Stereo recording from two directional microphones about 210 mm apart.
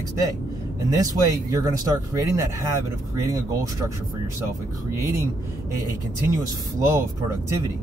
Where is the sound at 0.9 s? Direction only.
15° right (ahead or behind).